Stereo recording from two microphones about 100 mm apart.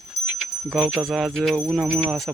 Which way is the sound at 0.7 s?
Centre (ahead or behind).